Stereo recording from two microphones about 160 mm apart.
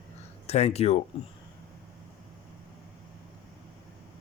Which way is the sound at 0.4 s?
40° left (ahead or behind).